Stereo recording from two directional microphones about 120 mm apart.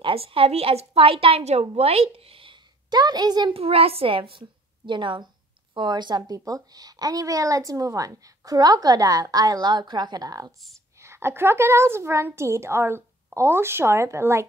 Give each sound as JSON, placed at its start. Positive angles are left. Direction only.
{"t": 0.0, "sound": "a woman's voice", "side_deg": -50}
{"t": 3.5, "sound": "a woman's voice", "side_deg": -55}
{"t": 11.0, "sound": "a woman's voice", "side_deg": -20}